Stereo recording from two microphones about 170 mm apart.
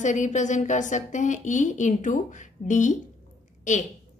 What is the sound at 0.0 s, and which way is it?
A woman's voice, 45° left (ahead or behind).